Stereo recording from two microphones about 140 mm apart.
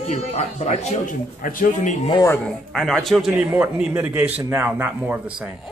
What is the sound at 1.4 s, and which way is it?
Speech, 75° left (ahead or behind).